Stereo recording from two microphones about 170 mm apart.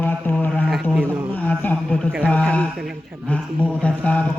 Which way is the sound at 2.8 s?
5° right (ahead or behind).